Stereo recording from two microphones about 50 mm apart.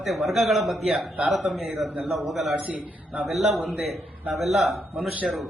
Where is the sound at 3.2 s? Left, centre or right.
Centre.